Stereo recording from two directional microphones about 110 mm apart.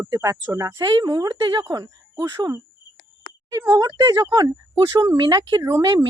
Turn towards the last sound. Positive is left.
turn(degrees=-35)  # may be behind; listen again after turning